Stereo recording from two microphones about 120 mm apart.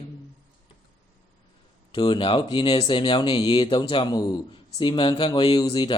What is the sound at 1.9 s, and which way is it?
Speech, 40° left (ahead or behind).